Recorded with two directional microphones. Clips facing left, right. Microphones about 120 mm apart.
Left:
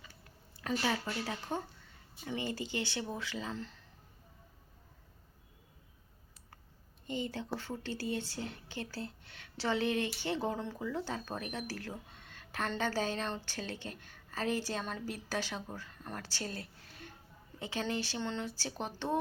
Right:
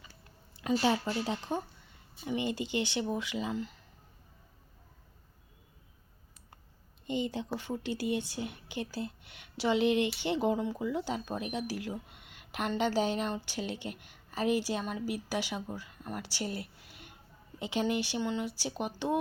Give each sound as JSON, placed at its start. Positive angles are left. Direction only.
{"t": 0.5, "sound": "a sound", "side_deg": -15}
{"t": 0.8, "sound": "a woman's voice", "side_deg": -25}
{"t": 7.1, "sound": "a woman's voice", "side_deg": -20}